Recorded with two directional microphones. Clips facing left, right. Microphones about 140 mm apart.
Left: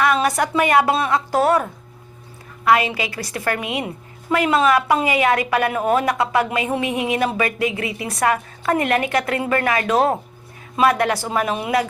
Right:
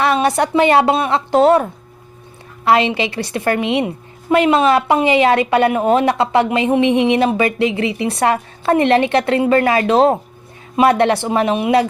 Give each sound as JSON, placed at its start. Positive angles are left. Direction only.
{"t": 0.0, "sound": "a woman's voice", "side_deg": -30}
{"t": 2.6, "sound": "a woman's voice", "side_deg": -25}